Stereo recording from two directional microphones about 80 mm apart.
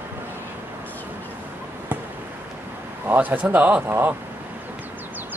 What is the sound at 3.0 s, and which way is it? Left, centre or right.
A man's voice, right.